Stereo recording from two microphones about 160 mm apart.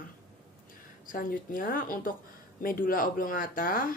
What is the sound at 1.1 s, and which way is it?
Speech, 60° left (ahead or behind).